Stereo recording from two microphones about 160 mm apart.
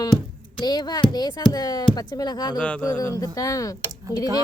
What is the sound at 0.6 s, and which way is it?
Speech, 25° left (ahead or behind).